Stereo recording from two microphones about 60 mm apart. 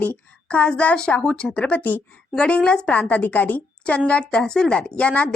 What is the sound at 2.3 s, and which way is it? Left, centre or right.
A woman's voice, centre.